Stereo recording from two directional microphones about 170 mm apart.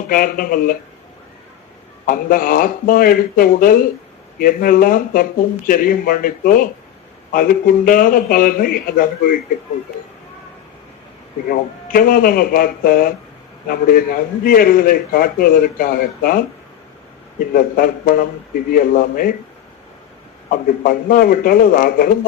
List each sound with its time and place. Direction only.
0.1 s a man's voice: 55° left (ahead or behind)
2.0 s a man's voice: 55° left (ahead or behind)
11.4 s a man's voice: 55° left (ahead or behind)
17.5 s a man's voice: 55° left (ahead or behind)
20.5 s a man's voice: 55° left (ahead or behind)